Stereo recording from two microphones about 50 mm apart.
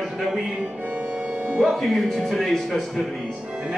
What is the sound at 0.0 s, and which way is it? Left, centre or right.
Music, centre.